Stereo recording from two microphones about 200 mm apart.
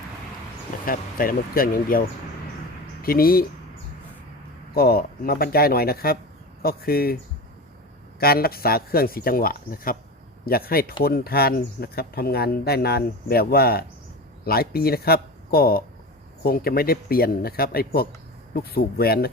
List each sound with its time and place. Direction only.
0.9 s speech: 45° left (ahead or behind)
4.7 s speech: 50° left (ahead or behind)
8.2 s speech: 50° left (ahead or behind)